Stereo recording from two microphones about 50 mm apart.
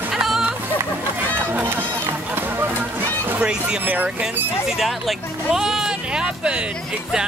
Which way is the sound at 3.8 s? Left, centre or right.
Right.